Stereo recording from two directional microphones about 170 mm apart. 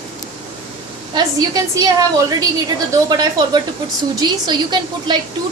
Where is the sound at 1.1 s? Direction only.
25° right (ahead or behind).